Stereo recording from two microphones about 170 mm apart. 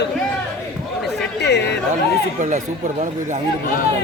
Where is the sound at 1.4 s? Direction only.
80° left.